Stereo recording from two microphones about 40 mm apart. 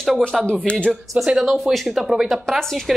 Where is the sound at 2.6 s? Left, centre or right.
Centre.